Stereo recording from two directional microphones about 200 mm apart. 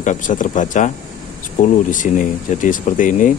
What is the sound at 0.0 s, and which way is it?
Speech, 40° left (ahead or behind).